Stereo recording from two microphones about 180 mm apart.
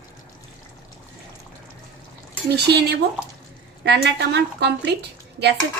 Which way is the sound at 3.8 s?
70° right (ahead or behind).